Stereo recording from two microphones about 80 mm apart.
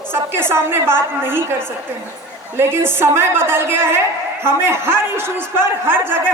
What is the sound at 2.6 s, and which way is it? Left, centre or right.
A man's voice, right.